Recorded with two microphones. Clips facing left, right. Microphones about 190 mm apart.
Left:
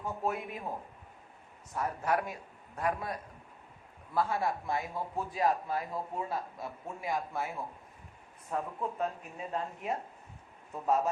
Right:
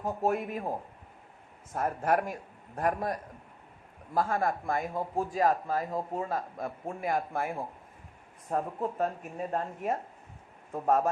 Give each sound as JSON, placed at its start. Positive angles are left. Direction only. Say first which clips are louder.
{"t": 0.0, "sound": "a man's voice", "louder": "right 5 dB", "side_deg": -45}
{"t": 1.7, "sound": "a man's voice", "louder": "right 4 dB", "side_deg": -50}